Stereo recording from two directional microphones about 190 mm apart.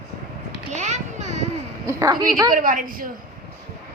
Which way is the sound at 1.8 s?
15° right (ahead or behind).